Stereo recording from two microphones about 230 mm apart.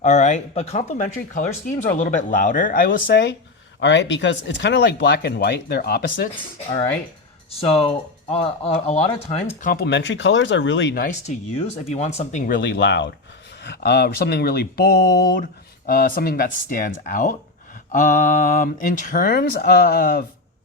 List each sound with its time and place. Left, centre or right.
0.0 s speech: left
7.6 s speech: left
11.5 s speech: left